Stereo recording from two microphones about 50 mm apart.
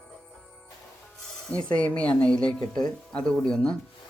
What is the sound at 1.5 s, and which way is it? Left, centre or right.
Speech, left.